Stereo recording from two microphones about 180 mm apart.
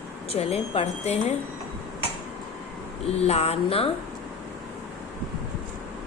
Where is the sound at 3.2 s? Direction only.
35° left (ahead or behind).